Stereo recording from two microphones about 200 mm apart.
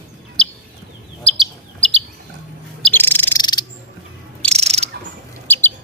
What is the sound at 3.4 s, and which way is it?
Bird, 20° left (ahead or behind).